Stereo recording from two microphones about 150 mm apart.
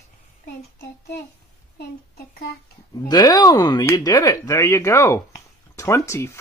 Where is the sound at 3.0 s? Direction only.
25° left (ahead or behind).